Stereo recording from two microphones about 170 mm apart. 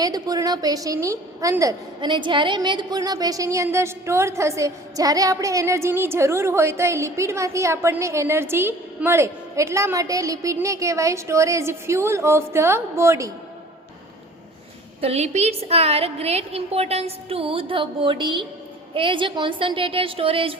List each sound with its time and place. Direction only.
0.0 s a woman's voice: 20° right (ahead or behind)
15.0 s a woman's voice: 40° right (ahead or behind)